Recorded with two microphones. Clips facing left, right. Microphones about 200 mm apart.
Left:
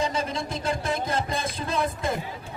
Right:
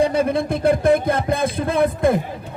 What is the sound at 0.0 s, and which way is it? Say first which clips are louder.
Speech: right 10 dB; 55° right (ahead or behind).